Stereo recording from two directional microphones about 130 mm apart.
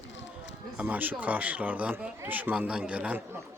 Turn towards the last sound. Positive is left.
turn(degrees=-10)  # may be behind; listen again after turning